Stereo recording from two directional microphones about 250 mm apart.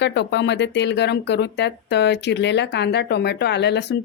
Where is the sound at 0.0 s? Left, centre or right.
Left.